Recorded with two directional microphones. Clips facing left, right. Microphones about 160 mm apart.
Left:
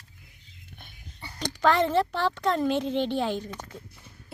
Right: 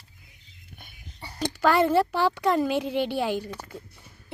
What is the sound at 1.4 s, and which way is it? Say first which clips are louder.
A woman's voice: right 2 dB; 5° right (ahead or behind).